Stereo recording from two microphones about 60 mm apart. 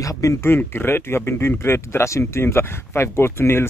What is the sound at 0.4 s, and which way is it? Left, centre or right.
Speech, left.